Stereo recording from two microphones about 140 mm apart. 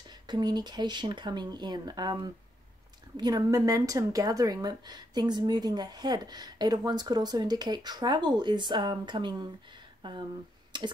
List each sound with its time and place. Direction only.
0.1 s speech: 30° right (ahead or behind)
10.7 s clicking: 35° right (ahead or behind)